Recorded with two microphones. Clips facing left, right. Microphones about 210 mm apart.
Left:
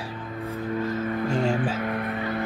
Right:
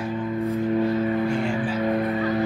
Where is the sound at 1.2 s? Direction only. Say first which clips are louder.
Even; 40° left (ahead or behind).